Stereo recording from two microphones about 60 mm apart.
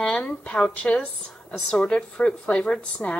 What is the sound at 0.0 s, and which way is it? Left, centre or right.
A woman's voice, centre.